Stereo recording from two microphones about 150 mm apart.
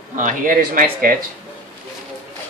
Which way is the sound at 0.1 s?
60° right (ahead or behind).